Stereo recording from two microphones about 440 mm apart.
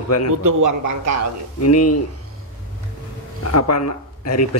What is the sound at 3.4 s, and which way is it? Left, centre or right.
Speech, left.